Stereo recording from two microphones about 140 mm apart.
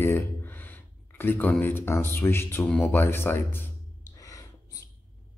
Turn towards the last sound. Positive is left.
turn(degrees=25)  # may be behind; listen again after turning